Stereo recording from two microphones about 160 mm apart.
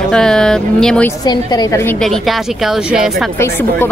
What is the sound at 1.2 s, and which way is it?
Speech, 25° left (ahead or behind).